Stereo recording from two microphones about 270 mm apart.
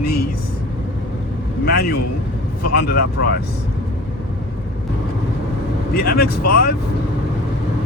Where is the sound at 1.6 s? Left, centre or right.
Left.